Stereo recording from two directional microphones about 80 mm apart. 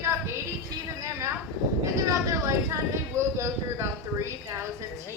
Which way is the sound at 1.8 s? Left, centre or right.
Right.